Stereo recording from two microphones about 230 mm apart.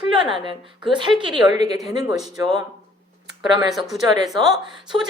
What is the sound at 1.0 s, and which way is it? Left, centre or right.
Speech, right.